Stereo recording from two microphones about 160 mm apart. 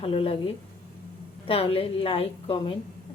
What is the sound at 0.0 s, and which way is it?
A woman's voice, 35° left (ahead or behind).